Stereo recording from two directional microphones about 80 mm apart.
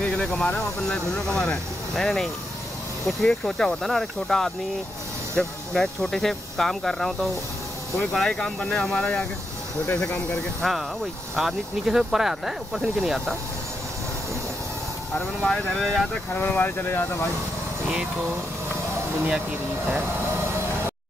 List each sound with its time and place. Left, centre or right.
0.0 s speech: centre
11.3 s speech: centre
15.4 s speech: centre
16.3 s speech: left